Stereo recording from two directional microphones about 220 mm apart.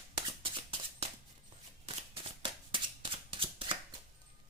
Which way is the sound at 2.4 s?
20° right (ahead or behind).